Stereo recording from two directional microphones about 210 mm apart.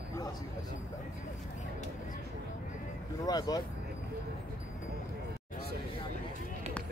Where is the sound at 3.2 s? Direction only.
20° left (ahead or behind).